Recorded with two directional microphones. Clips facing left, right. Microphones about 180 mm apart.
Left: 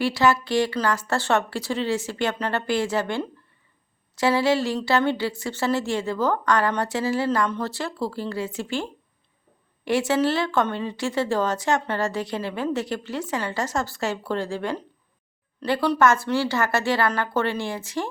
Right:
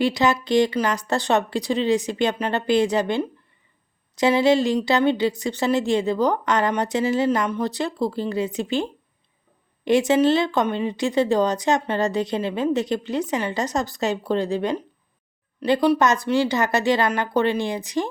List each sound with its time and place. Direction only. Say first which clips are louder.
0.0 s speech: right 1 dB; 20° right (ahead or behind)